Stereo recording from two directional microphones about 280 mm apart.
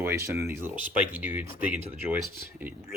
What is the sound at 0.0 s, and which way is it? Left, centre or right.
Speech, centre.